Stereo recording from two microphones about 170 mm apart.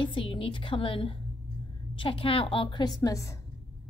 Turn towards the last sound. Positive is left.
turn(degrees=20)  # may be behind; listen again after turning